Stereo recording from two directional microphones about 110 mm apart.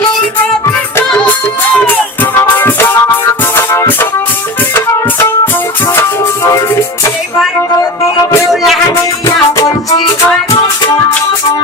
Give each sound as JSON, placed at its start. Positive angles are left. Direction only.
{"t": 1.7, "sound": "music", "side_deg": 15}
{"t": 9.2, "sound": "music", "side_deg": 30}